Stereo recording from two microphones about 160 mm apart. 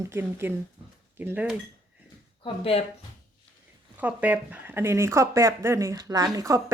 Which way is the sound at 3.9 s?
10° right (ahead or behind).